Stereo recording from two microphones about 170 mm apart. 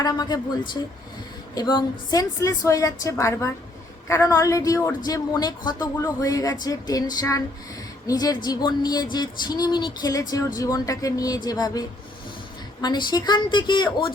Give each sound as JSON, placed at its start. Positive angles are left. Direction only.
{"t": 0.0, "sound": "speech", "side_deg": 25}
{"t": 1.5, "sound": "speech", "side_deg": 25}